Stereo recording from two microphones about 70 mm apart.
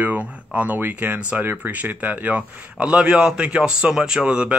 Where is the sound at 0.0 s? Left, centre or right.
Right.